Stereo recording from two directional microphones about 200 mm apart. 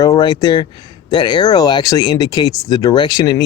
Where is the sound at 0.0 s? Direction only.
20° left (ahead or behind).